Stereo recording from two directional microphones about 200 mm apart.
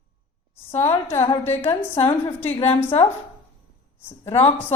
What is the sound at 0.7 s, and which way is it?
Speech, 15° left (ahead or behind).